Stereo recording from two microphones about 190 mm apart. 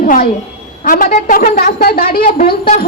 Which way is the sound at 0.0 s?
45° left (ahead or behind).